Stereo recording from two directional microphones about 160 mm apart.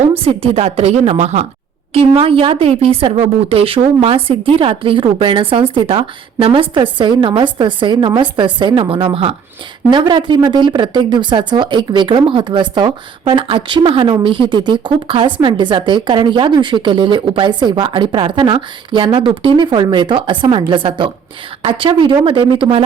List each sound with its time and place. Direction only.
0.2 s a woman's voice: 35° right (ahead or behind)